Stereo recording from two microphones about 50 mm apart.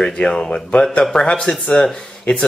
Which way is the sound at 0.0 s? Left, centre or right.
Centre.